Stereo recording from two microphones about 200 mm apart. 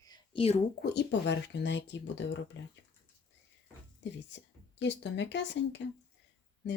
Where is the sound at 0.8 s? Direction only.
60° left (ahead or behind).